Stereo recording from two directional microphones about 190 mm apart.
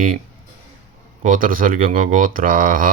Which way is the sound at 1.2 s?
45° right (ahead or behind).